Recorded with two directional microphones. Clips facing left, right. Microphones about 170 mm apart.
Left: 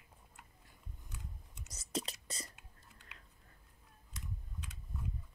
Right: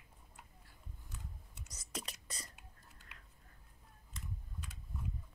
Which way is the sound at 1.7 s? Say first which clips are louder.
Left 7 dB; 25° left (ahead or behind).